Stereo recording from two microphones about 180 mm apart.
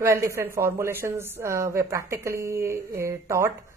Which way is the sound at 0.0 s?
15° right (ahead or behind).